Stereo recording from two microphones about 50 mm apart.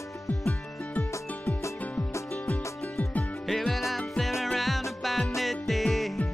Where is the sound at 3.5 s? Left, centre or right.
Centre.